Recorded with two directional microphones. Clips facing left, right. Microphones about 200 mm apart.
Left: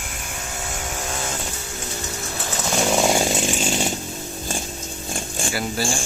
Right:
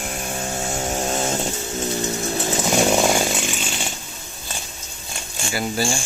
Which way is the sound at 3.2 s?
35° left (ahead or behind).